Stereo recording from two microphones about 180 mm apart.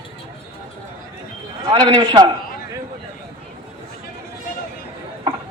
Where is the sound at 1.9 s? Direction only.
25° right (ahead or behind).